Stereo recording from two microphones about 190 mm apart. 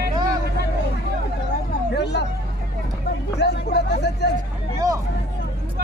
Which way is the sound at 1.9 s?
65° left (ahead or behind).